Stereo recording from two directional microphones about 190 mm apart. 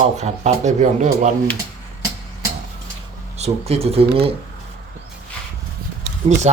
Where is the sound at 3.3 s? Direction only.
35° right (ahead or behind).